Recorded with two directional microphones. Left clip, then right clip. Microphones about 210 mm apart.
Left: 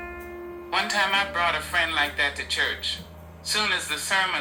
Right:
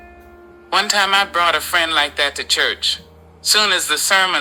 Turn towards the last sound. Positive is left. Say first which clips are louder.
# right 9 dB
turn(degrees=-45)  # may be behind; listen again after turning